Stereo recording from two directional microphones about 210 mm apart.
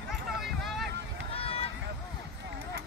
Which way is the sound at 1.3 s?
25° left (ahead or behind).